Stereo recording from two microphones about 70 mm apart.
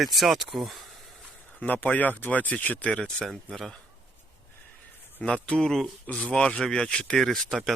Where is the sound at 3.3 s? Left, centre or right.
Centre.